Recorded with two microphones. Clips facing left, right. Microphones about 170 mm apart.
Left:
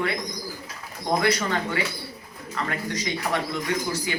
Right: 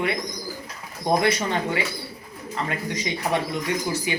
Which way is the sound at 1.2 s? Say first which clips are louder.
Right 1 dB; 20° right (ahead or behind).